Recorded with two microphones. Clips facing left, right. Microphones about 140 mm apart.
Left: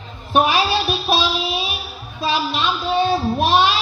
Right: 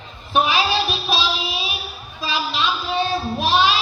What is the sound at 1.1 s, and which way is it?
Child singing, 50° left (ahead or behind).